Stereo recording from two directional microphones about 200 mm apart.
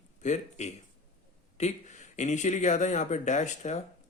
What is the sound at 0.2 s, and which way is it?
Speech, 35° left (ahead or behind).